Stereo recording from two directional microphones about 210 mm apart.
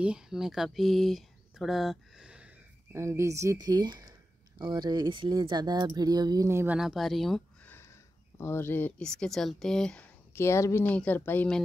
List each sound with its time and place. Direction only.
0.0 s speech: 5° right (ahead or behind)